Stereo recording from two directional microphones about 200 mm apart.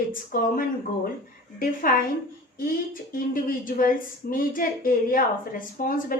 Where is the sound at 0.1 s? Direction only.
45° left (ahead or behind).